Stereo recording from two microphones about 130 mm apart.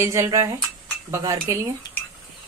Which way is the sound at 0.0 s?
20° right (ahead or behind).